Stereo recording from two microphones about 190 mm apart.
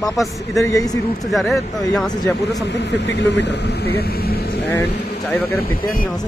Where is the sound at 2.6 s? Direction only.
65° left (ahead or behind); by 6.1 s 50° left (ahead or behind).